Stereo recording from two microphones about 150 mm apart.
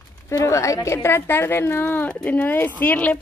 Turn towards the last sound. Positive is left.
turn(degrees=10)  # may be behind; listen again after turning